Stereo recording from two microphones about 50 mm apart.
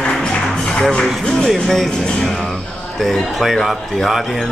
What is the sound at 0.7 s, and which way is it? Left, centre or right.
Speech, centre.